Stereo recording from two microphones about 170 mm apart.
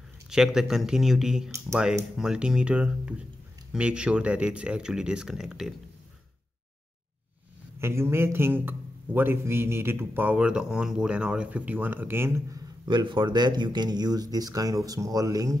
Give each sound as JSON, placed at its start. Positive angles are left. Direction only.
{"t": 0.3, "sound": "speech", "side_deg": -5}
{"t": 7.8, "sound": "a man's voice", "side_deg": -15}